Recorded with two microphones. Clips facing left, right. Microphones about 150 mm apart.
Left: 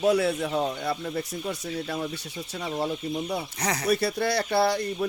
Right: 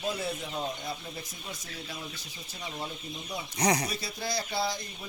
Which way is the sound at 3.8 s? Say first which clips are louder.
Left 11 dB; 65° left (ahead or behind).